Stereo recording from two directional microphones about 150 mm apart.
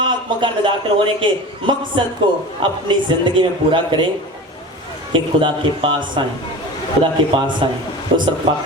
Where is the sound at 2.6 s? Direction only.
35° right (ahead or behind).